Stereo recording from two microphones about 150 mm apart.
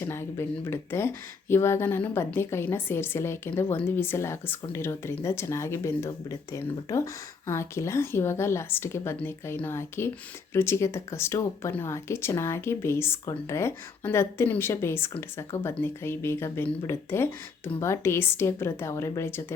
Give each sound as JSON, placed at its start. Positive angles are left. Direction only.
{"t": 0.0, "sound": "speech", "side_deg": 15}